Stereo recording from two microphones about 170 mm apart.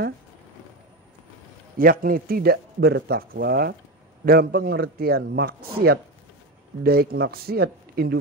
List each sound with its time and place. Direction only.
1.8 s a man's voice: 60° right (ahead or behind)